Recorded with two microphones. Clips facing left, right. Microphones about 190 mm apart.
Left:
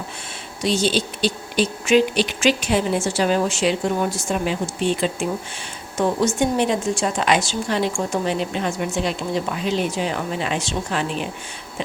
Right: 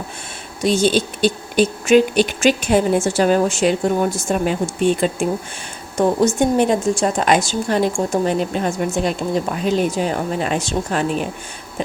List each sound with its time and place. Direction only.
0.6 s a woman's voice: 50° right (ahead or behind)